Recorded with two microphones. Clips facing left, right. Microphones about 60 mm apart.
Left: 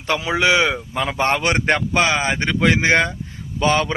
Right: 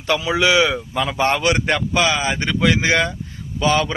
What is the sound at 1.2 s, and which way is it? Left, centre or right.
A man's voice, left.